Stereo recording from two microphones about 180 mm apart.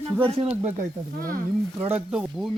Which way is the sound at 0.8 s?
50° right (ahead or behind).